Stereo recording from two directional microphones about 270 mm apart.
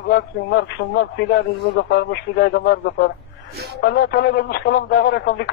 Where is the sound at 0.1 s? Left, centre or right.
Left.